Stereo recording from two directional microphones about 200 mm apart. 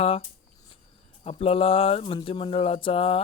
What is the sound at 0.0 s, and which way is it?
Speech, 30° left (ahead or behind).